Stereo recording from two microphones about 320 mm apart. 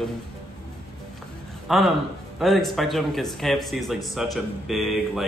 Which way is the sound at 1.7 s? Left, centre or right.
Centre.